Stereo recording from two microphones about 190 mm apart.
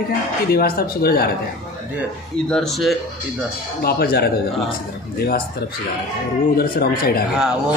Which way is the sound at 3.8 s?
55° left (ahead or behind).